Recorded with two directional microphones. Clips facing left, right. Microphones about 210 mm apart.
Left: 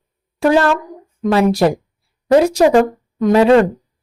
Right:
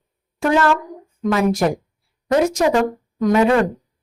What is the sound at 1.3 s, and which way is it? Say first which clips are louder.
Speech: left 4 dB; 35° left (ahead or behind).